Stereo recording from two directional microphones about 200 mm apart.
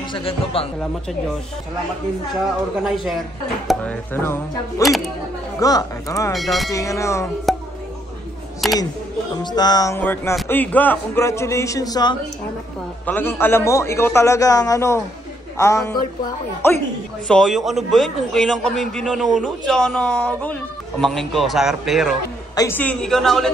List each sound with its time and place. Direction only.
0.1 s a sound: 25° left (ahead or behind)
3.6 s a man's voice: 5° left (ahead or behind)
4.8 s a man's voice: centre (ahead or behind)
5.6 s a man's voice: 15° left (ahead or behind)
6.3 s a man's voice: centre (ahead or behind)
6.7 s a man's voice: 15° left (ahead or behind)
7.5 s music: centre (ahead or behind)
8.6 s speech: centre (ahead or behind)
9.4 s a sound: 20° left (ahead or behind)
10.5 s a man's voice: 10° left (ahead or behind)
13.0 s a man's voice: 10° left (ahead or behind)
17.3 s a man's voice: centre (ahead or behind)
22.6 s a man's voice: 10° left (ahead or behind)